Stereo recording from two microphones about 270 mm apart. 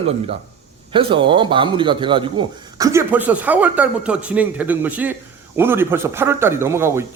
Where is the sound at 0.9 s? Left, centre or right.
Centre.